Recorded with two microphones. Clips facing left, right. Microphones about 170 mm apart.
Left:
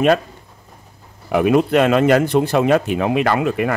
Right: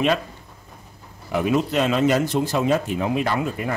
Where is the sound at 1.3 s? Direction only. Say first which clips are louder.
Left 6 dB; 60° left (ahead or behind).